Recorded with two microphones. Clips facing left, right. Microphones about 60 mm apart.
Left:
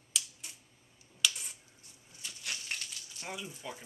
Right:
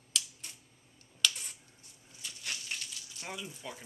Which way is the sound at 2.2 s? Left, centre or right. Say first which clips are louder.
Even; centre.